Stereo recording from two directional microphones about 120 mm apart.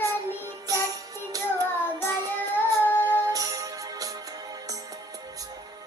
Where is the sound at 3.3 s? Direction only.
30° right (ahead or behind).